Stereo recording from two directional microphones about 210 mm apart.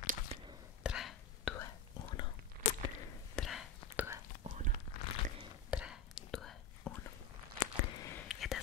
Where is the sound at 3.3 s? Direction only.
Centre (ahead or behind).